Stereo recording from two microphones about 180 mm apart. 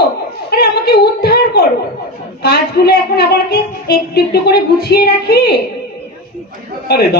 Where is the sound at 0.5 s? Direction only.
60° left (ahead or behind).